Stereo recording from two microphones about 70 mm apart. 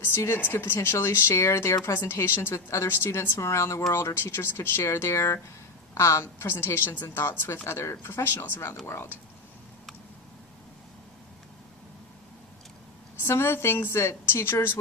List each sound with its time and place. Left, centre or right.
0.0 s speech: left
13.2 s speech: left